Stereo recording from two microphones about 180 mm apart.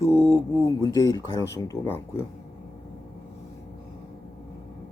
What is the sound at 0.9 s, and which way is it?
Speech, 20° left (ahead or behind).